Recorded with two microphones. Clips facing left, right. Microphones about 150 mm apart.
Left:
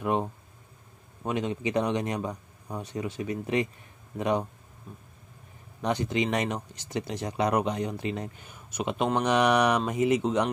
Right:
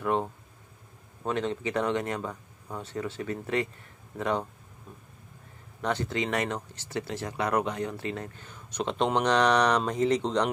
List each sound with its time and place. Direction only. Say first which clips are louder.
0.0 s a sound: even; 15° left (ahead or behind)
1.2 s speech: even; 15° left (ahead or behind)
5.8 s speech: left 2 dB; 15° left (ahead or behind)